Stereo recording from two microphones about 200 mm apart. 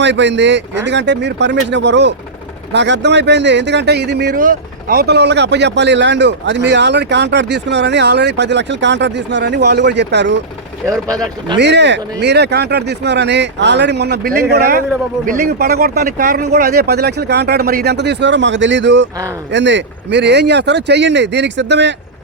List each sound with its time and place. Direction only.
0.0 s speech: 60° right (ahead or behind)
11.5 s speech: 60° right (ahead or behind)